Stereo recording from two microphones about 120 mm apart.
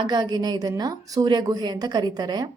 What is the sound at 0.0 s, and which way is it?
Speech, 35° right (ahead or behind).